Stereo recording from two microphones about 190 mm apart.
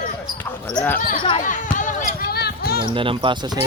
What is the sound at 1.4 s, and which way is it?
Basketball bounce, 40° left (ahead or behind).